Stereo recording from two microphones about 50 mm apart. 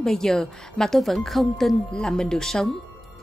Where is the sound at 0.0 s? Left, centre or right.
Centre.